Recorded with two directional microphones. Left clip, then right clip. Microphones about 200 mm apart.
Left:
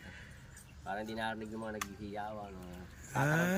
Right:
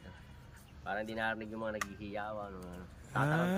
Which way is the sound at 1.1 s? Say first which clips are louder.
Right 2 dB; centre (ahead or behind).